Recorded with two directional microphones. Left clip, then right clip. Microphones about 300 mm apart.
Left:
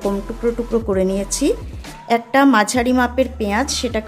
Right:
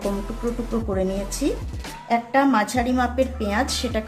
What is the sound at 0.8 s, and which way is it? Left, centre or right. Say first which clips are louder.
A woman's voice: left 6 dB; left.